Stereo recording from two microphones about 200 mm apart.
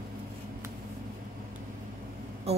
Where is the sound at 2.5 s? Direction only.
30° right (ahead or behind).